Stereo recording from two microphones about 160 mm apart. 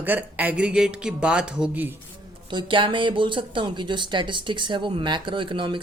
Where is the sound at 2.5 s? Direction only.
30° right (ahead or behind).